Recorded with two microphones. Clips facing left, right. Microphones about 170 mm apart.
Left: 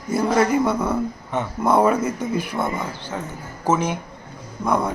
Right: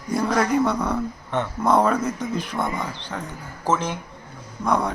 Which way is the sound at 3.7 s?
15° left (ahead or behind).